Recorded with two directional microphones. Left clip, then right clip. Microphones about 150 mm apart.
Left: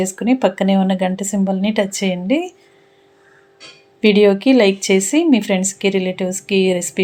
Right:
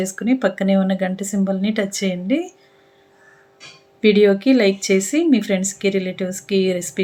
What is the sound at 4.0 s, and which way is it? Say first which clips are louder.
A woman's voice: left 2 dB; 20° left (ahead or behind).